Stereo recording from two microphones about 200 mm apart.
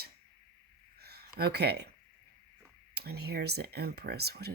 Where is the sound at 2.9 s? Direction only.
55° right (ahead or behind).